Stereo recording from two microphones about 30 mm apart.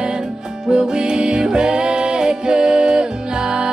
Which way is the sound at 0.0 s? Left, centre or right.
Right.